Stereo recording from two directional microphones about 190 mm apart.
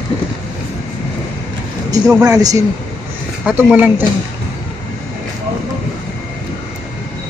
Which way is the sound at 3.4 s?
5° right (ahead or behind).